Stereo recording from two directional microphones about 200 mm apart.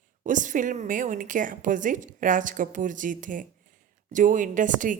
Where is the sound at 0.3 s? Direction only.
40° right (ahead or behind).